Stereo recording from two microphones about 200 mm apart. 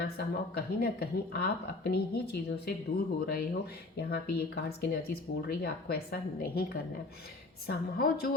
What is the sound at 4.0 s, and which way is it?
Speech, 55° left (ahead or behind).